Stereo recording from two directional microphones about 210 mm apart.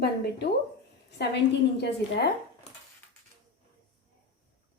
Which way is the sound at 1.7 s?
55° left (ahead or behind).